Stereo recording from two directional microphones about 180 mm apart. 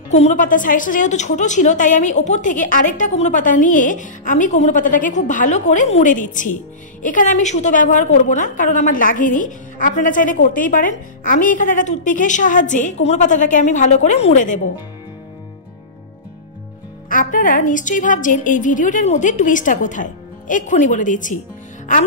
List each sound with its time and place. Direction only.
0.1 s a woman's voice: 40° left (ahead or behind)
17.1 s a woman's voice: 50° left (ahead or behind)